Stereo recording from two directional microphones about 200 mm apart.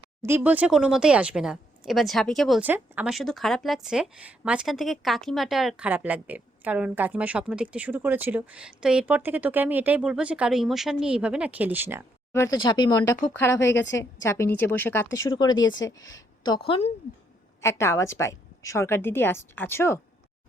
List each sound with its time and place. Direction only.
0.2 s speech: 10° right (ahead or behind)
12.3 s a woman's voice: 15° left (ahead or behind)
17.6 s a woman's voice: 15° left (ahead or behind)